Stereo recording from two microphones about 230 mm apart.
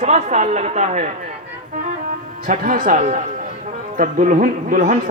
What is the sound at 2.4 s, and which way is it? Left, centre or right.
Speech, right.